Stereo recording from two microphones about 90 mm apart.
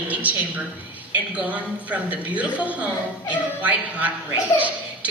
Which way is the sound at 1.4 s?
15° right (ahead or behind).